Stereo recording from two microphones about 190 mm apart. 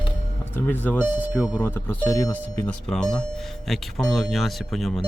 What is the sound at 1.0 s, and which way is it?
Speech, 10° right (ahead or behind).